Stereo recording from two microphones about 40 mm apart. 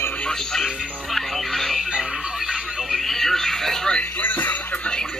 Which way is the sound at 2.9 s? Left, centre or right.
Centre.